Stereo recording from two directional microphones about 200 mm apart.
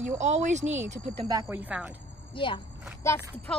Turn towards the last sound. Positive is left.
turn(degrees=15)  # may be behind; listen again after turning